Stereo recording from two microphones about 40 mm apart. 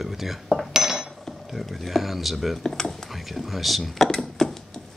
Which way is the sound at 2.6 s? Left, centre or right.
Centre.